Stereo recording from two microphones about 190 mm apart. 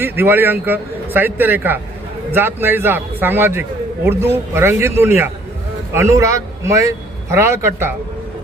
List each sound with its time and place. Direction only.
0.0 s a man's voice: 10° right (ahead or behind)